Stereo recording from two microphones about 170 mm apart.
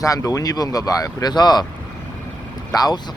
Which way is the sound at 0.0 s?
20° left (ahead or behind).